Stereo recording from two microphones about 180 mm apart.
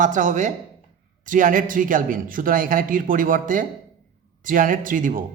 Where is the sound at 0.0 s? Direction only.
45° right (ahead or behind).